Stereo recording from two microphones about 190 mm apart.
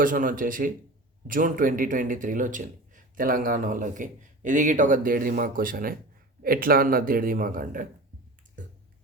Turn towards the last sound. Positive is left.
turn(degrees=-45)  # may be behind; listen again after turning